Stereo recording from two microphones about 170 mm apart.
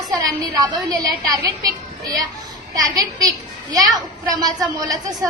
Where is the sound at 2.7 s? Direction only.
20° right (ahead or behind).